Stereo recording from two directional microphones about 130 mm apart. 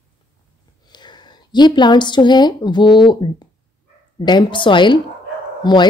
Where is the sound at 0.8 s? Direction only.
35° left (ahead or behind).